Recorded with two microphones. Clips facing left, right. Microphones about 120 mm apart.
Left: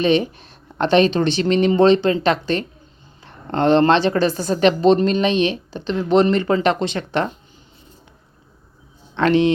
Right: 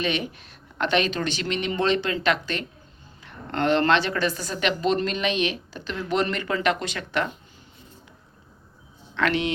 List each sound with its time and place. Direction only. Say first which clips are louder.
0.0 s speech: left 10 dB; 30° left (ahead or behind)
9.1 s speech: left 8 dB; 30° left (ahead or behind)